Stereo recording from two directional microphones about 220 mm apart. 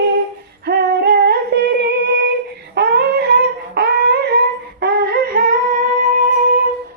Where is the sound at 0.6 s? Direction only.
45° right (ahead or behind).